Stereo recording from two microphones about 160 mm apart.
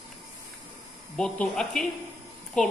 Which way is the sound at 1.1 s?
5° left (ahead or behind).